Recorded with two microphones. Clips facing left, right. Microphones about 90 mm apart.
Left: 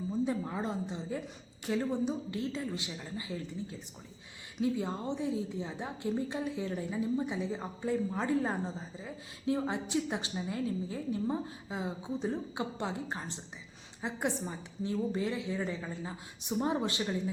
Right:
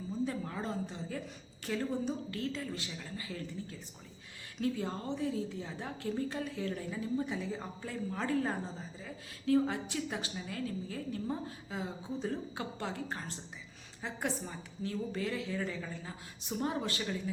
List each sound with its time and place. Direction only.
0.1 s a woman's voice: 20° left (ahead or behind)